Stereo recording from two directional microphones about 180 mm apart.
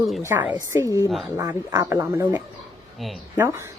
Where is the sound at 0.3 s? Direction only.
10° right (ahead or behind).